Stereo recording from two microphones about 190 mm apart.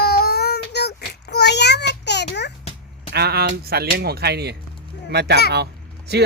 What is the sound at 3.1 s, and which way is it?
Speech, 55° right (ahead or behind).